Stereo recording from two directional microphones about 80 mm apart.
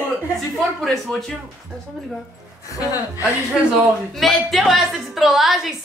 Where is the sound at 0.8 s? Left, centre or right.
Centre.